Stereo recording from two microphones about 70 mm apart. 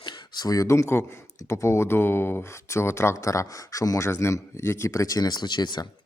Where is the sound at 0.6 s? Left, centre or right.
Left.